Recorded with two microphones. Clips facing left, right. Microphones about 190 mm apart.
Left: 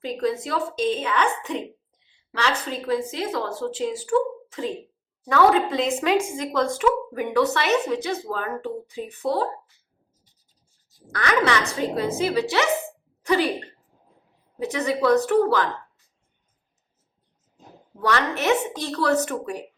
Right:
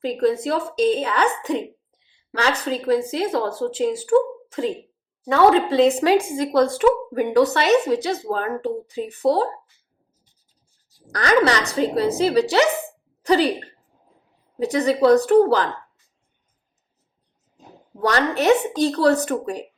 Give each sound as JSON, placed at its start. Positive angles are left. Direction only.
{"t": 0.0, "sound": "speech", "side_deg": -35}
{"t": 5.2, "sound": "speech", "side_deg": -25}
{"t": 11.1, "sound": "speech", "side_deg": -40}
{"t": 14.6, "sound": "speech", "side_deg": -35}
{"t": 17.9, "sound": "speech", "side_deg": -35}